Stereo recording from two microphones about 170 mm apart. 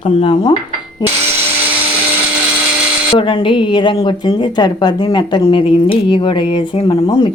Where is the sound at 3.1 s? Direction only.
30° left (ahead or behind).